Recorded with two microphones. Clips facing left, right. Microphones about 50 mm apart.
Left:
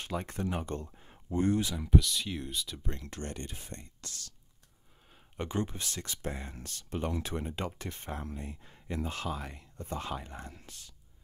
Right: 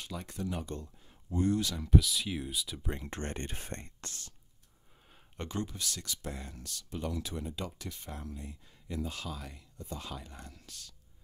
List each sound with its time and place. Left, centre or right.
0.0 s speech: left
1.7 s speech: centre
2.0 s speech: centre
3.1 s speech: right
5.4 s speech: left